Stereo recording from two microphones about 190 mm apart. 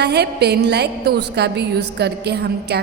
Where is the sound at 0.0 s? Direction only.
60° right (ahead or behind).